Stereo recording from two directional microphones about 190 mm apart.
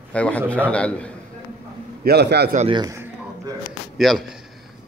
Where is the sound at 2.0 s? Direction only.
60° right (ahead or behind).